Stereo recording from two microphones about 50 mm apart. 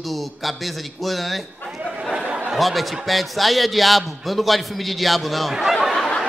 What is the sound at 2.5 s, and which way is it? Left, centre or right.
A man's voice, centre.